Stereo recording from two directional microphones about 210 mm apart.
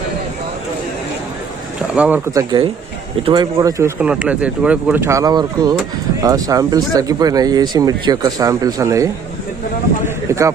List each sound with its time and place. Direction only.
2.0 s speech: 10° right (ahead or behind)